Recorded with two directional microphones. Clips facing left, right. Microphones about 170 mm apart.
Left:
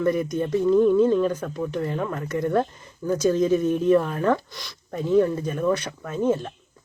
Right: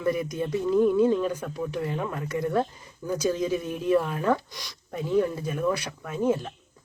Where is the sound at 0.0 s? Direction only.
5° right (ahead or behind).